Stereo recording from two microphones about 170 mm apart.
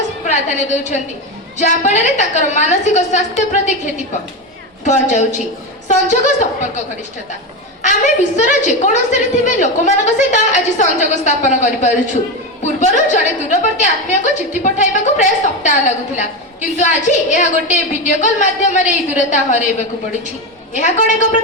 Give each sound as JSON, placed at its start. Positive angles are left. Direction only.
{"t": 0.3, "sound": "a woman's voice", "side_deg": 45}
{"t": 7.8, "sound": "a woman's voice", "side_deg": 45}
{"t": 20.7, "sound": "a woman's voice", "side_deg": 45}